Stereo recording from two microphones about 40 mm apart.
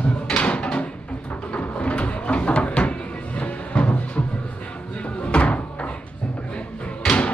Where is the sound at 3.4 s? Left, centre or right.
Left.